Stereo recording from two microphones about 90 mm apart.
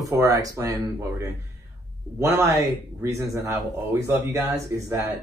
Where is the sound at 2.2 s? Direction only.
30° right (ahead or behind).